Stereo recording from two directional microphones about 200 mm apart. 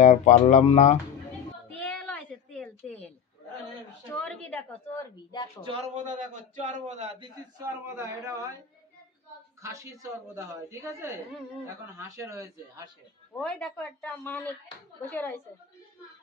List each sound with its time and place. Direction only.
0.0 s speech: 35° left (ahead or behind)
1.7 s a sound: 5° left (ahead or behind)
4.1 s a woman's voice: 5° left (ahead or behind)
5.6 s speech: 30° right (ahead or behind)
7.2 s speech: 20° right (ahead or behind)
9.6 s speech: 15° right (ahead or behind)
13.4 s a woman's voice: 5° left (ahead or behind)